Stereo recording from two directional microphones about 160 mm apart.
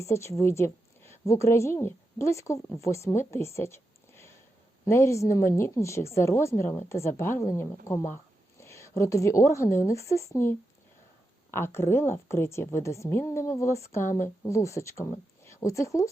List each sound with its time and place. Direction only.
0.0 s a woman's voice: 15° left (ahead or behind)
11.5 s a woman's voice: 15° left (ahead or behind)